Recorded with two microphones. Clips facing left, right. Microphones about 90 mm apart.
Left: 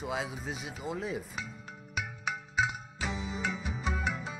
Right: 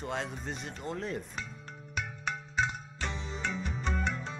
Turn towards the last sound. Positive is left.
turn(degrees=5)  # may be behind; listen again after turning